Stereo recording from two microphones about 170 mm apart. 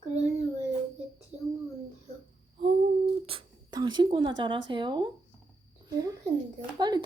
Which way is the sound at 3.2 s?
30° right (ahead or behind).